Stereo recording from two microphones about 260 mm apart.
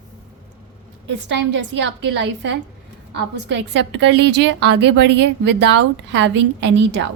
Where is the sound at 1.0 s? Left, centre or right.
Right.